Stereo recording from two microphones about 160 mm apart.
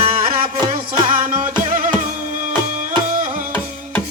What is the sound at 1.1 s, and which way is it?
Music, 55° right (ahead or behind).